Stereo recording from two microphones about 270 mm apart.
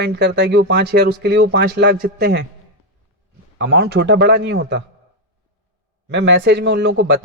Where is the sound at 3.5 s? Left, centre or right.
Right.